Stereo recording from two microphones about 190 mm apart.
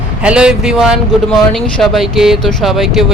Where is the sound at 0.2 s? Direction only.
5° right (ahead or behind).